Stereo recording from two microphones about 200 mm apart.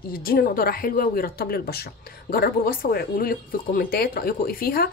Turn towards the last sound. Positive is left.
turn(degrees=50)  # may be behind; listen again after turning